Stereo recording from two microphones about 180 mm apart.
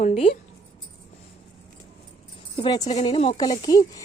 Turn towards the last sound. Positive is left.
turn(degrees=20)  # may be behind; listen again after turning